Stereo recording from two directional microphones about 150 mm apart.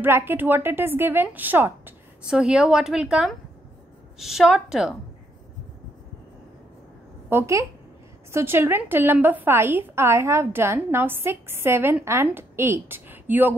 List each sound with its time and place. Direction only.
0.0 s a woman's voice: 15° right (ahead or behind)
7.2 s a woman's voice: 20° right (ahead or behind)